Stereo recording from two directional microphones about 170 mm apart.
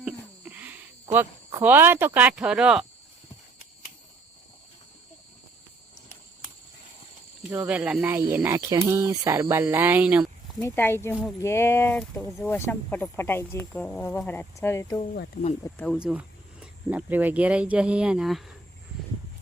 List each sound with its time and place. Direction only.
0.0 s cricket: 10° right (ahead or behind)
7.5 s speech: 5° right (ahead or behind)
10.6 s speech: 15° left (ahead or behind)
15.9 s speech: 5° right (ahead or behind)